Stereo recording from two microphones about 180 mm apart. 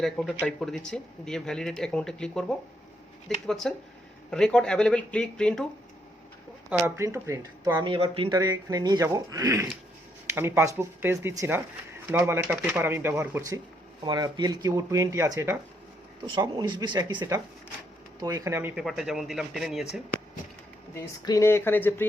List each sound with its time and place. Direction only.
0.0 s speech: centre (ahead or behind)
6.7 s speech: 5° right (ahead or behind)
7.9 s speech: 30° right (ahead or behind); by 13.6 s 15° right (ahead or behind)
14.0 s speech: 25° right (ahead or behind)
18.8 s speech: centre (ahead or behind)
20.9 s speech: 15° left (ahead or behind)